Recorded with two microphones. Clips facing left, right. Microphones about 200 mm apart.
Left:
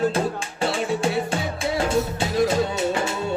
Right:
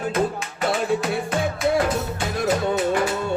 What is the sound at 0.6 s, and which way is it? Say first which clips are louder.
Music: right 1 dB; 30° left (ahead or behind).